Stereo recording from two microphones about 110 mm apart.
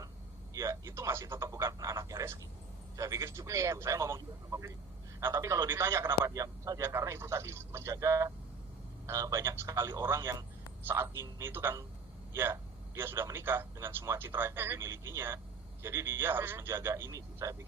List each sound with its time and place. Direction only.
0.5 s a man's voice: 30° right (ahead or behind)